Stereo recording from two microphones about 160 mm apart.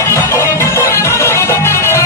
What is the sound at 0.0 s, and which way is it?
Music, 15° left (ahead or behind).